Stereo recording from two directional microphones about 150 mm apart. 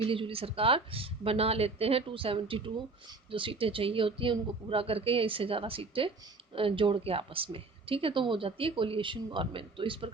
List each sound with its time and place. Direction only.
0.0 s a woman's voice: 35° right (ahead or behind)